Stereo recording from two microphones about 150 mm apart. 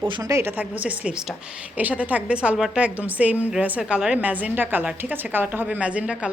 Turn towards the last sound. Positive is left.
turn(degrees=-10)  # may be behind; listen again after turning